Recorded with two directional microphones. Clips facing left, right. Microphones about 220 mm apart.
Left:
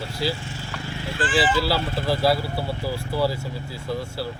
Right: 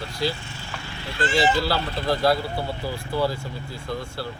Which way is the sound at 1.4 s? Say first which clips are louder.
Even; 5° left (ahead or behind).